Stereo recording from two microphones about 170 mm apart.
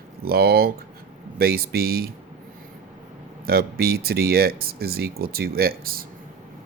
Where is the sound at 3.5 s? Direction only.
65° right (ahead or behind).